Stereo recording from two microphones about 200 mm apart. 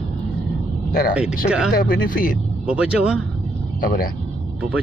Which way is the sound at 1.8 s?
45° left (ahead or behind).